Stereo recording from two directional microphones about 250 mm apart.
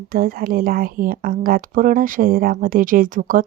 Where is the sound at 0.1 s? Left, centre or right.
Right.